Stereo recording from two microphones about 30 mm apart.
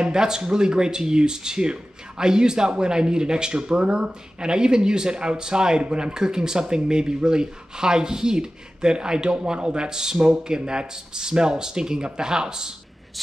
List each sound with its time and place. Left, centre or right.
0.0 s speech: right